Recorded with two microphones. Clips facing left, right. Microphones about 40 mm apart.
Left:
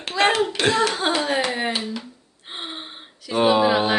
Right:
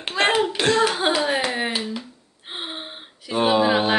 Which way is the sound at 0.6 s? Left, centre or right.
Centre.